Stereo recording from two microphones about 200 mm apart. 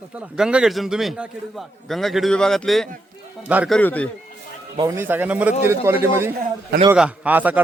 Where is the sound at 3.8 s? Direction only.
5° left (ahead or behind).